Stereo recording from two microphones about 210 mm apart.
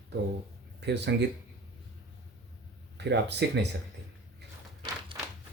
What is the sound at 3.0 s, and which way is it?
Speech, 55° right (ahead or behind).